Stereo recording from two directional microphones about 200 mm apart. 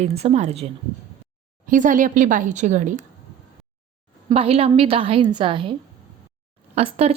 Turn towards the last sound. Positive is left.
turn(degrees=-30)  # may be behind; listen again after turning